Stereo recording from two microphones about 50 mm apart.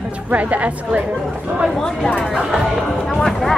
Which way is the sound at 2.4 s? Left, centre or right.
Centre.